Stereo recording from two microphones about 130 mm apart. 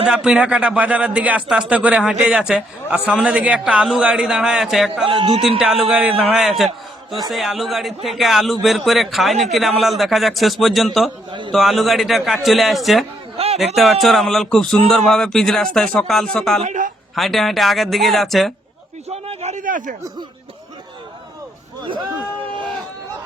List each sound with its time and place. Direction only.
0.1 s a man's voice: 5° right (ahead or behind)
5.0 s a man's voice: 40° right (ahead or behind)
5.5 s a man's voice: 5° right (ahead or behind)
11.3 s a man's voice: 40° right (ahead or behind)
11.5 s a man's voice: centre (ahead or behind)
13.3 s a sound: 50° right (ahead or behind)
13.7 s a man's voice: centre (ahead or behind)
16.6 s speech: 75° right (ahead or behind)
17.2 s a man's voice: centre (ahead or behind)
19.0 s a sound: 50° right (ahead or behind); by 20.0 s 85° right